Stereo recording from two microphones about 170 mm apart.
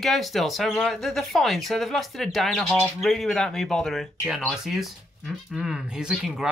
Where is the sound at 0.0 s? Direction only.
Centre (ahead or behind).